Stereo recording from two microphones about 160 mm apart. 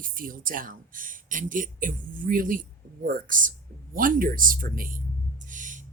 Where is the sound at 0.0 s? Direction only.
60° right (ahead or behind).